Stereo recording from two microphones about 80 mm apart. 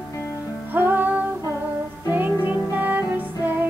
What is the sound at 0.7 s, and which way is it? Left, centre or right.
Music, right.